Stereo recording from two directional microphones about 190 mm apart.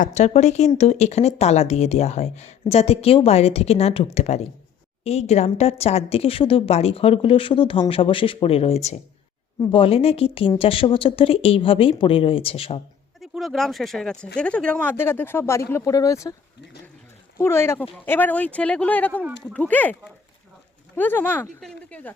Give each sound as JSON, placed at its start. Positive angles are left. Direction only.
{"t": 0.0, "sound": "a woman's voice", "side_deg": 35}
{"t": 13.1, "sound": "speech", "side_deg": 0}
{"t": 17.3, "sound": "speech", "side_deg": 15}